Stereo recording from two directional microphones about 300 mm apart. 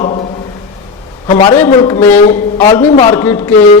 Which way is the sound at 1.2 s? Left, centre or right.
Centre.